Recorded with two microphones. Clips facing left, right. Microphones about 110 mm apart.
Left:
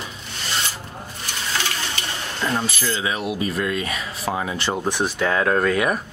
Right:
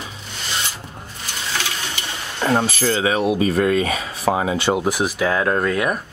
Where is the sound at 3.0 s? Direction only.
35° right (ahead or behind); by 5.9 s centre (ahead or behind).